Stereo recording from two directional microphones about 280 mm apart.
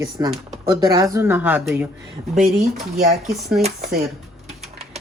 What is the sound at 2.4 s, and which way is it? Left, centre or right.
Speech, right.